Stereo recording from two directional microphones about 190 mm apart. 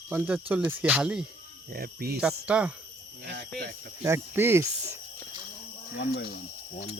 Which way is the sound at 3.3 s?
65° right (ahead or behind).